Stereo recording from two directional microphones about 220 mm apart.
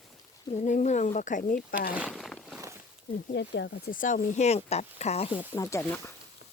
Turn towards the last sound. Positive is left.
turn(degrees=15)  # may be behind; listen again after turning